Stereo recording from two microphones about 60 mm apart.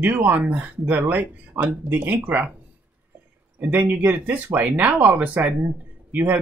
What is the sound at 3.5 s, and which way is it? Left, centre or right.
Speech, right.